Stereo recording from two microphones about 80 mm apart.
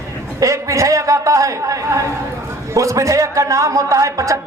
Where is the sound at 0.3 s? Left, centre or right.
Right.